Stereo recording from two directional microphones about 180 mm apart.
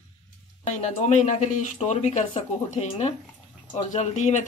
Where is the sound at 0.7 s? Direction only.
40° left (ahead or behind).